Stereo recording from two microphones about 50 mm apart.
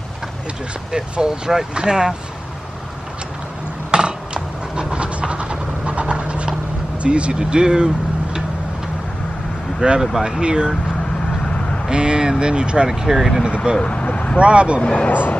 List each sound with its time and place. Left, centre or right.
0.9 s speech: centre
3.9 s vehicle: centre
7.0 s speech: right
9.8 s speech: centre
11.9 s speech: centre
13.7 s speech: left
14.4 s speech: right
14.8 s speech: left